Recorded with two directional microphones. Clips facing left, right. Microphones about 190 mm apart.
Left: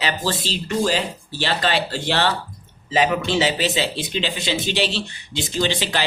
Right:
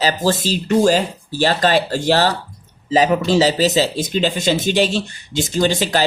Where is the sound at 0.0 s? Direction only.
45° right (ahead or behind).